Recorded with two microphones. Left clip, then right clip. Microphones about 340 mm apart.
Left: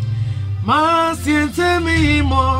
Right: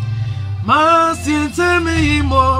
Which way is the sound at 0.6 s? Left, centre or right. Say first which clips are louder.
Right 3 dB; centre.